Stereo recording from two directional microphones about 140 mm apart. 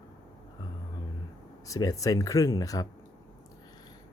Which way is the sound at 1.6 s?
25° left (ahead or behind).